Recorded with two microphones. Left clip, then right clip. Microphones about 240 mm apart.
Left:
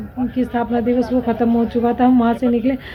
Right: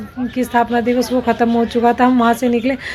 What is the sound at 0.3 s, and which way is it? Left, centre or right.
Speech, right.